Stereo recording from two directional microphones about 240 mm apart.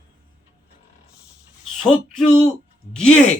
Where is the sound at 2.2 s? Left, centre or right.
Left.